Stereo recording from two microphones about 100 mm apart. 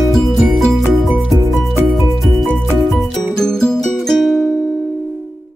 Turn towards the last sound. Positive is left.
turn(degrees=5)  # may be behind; listen again after turning